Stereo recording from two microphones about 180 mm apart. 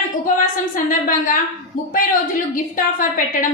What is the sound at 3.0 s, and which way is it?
Speech, 50° left (ahead or behind).